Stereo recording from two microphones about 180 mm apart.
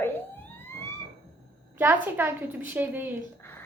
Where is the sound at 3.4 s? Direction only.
10° left (ahead or behind).